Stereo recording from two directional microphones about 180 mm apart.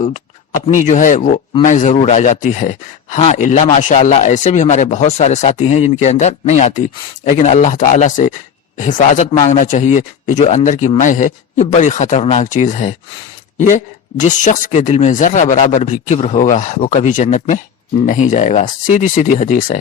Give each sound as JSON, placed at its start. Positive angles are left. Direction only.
{"t": 0.7, "sound": "speech", "side_deg": 45}